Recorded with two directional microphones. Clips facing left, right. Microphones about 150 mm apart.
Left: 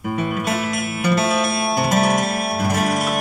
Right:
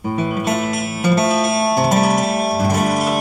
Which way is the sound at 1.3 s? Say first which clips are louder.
Right 4 dB; 25° right (ahead or behind).